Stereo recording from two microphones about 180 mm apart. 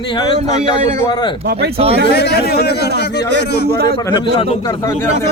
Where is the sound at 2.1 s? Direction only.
65° left (ahead or behind).